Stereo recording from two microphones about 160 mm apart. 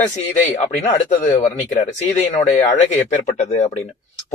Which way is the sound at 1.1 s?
45° left (ahead or behind).